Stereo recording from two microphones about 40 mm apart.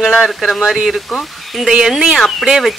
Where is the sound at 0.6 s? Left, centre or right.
Centre.